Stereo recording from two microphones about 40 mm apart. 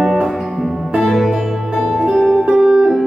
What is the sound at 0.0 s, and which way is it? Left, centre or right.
Music, centre.